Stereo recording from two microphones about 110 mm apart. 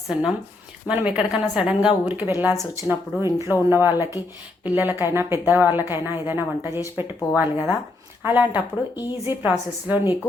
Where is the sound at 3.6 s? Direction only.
20° right (ahead or behind).